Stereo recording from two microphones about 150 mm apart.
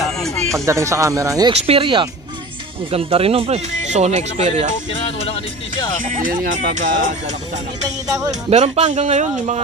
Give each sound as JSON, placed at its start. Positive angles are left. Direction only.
{"t": 0.2, "sound": "music", "side_deg": 0}
{"t": 0.7, "sound": "speech", "side_deg": -20}
{"t": 1.5, "sound": "speech", "side_deg": -40}
{"t": 4.9, "sound": "speech", "side_deg": 40}
{"t": 6.0, "sound": "speech", "side_deg": -60}
{"t": 8.5, "sound": "speech", "side_deg": -45}